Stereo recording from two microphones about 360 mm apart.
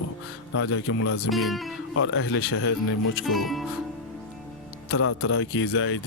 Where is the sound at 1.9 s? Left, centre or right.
Left.